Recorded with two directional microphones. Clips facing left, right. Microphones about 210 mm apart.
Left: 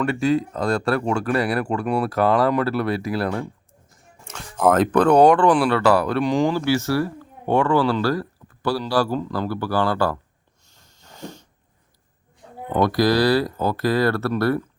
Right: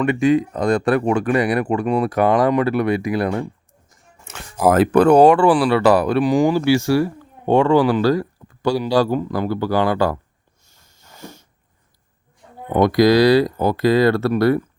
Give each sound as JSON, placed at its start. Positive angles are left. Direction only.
{"t": 0.0, "sound": "speech", "side_deg": -15}
{"t": 5.8, "sound": "speech", "side_deg": -15}
{"t": 11.1, "sound": "a sound", "side_deg": 15}
{"t": 12.6, "sound": "speech", "side_deg": -15}